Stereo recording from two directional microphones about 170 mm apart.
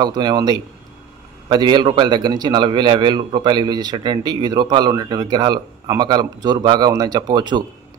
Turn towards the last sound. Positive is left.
turn(degrees=-25)  # may be behind; listen again after turning